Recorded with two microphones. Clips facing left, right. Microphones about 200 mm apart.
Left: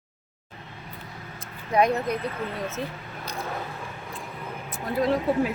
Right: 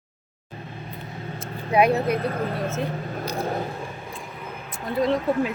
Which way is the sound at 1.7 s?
10° right (ahead or behind).